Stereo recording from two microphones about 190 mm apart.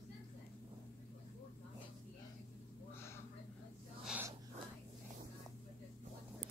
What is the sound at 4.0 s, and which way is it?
Wheeze, 5° right (ahead or behind).